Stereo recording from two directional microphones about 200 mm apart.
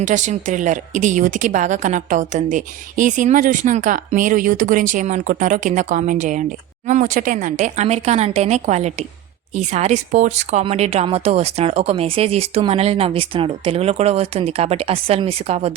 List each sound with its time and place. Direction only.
0.0 s a woman's voice: 35° right (ahead or behind)